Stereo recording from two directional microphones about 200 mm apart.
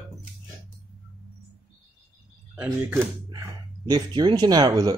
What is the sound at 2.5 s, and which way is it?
Speech, 10° right (ahead or behind).